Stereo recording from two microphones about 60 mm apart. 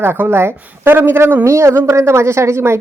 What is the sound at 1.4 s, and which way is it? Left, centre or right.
Speech, right.